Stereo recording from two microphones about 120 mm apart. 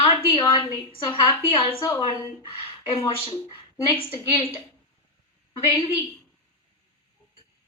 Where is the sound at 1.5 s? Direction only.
50° left (ahead or behind).